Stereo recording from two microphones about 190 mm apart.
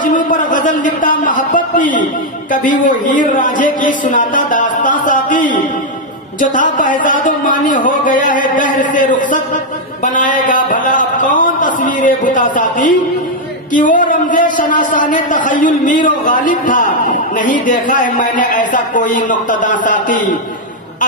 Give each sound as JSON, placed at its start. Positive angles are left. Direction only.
{"t": 0.0, "sound": "a man's voice", "side_deg": 45}